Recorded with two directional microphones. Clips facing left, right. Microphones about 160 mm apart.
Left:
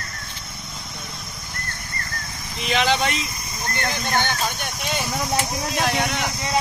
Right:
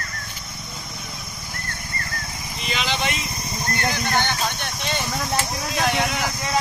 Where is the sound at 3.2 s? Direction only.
30° right (ahead or behind).